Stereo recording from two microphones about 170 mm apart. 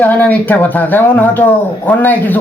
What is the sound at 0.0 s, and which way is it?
Speech, 10° left (ahead or behind).